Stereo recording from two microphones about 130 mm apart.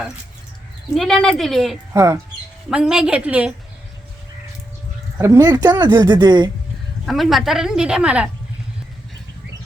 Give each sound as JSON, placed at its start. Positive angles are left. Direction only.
{"t": 0.9, "sound": "a woman's voice", "side_deg": 0}
{"t": 1.9, "sound": "speech", "side_deg": -25}
{"t": 2.6, "sound": "a woman's voice", "side_deg": -5}
{"t": 5.2, "sound": "speech", "side_deg": -25}
{"t": 7.0, "sound": "a woman's voice", "side_deg": 0}